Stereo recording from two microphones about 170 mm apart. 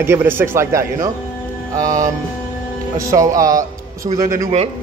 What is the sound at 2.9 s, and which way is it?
A man's voice, 20° right (ahead or behind).